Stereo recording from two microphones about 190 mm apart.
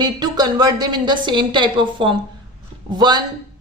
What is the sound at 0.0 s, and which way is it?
Speech, 20° right (ahead or behind).